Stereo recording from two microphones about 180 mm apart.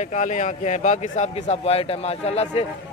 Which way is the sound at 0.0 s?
45° left (ahead or behind).